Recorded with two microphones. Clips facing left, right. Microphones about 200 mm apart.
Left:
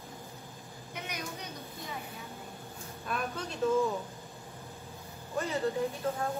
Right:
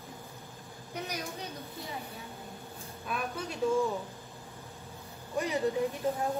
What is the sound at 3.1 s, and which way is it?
Speech, 5° right (ahead or behind).